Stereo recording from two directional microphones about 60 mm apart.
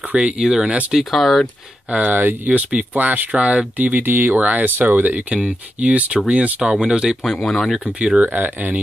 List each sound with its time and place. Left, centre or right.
0.4 s speech: centre
1.1 s speech: centre
1.9 s speech: right
7.3 s speech: centre
8.0 s speech: right